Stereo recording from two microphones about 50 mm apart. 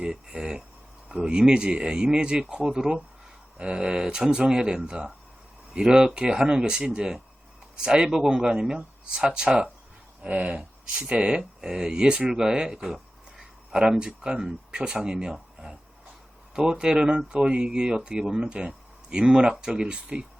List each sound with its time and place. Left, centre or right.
0.0 s speech: centre